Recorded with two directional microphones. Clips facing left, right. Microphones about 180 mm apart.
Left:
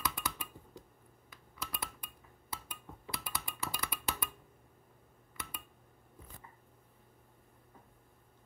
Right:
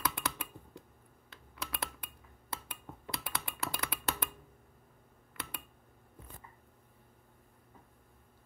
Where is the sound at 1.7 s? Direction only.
65° right (ahead or behind).